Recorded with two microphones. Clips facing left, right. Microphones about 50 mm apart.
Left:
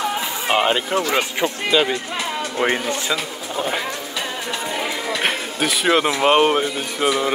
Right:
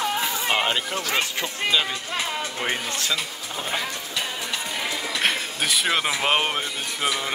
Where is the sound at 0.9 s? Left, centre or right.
Left.